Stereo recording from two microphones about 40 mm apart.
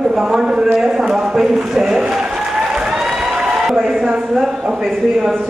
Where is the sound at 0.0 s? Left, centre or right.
Centre.